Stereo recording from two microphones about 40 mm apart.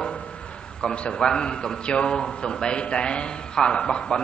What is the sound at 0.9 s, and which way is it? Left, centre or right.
A man's voice, left.